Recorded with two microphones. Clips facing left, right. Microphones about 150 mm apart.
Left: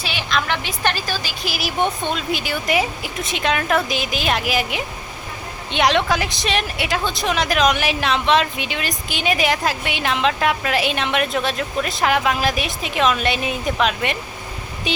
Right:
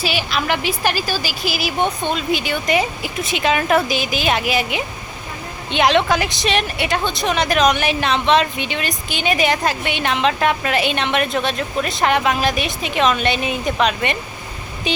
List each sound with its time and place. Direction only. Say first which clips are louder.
0.0 s a woman's voice: right 2 dB; 5° right (ahead or behind)